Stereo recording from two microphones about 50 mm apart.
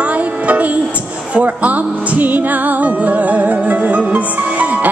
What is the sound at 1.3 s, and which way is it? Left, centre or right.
Speech, right.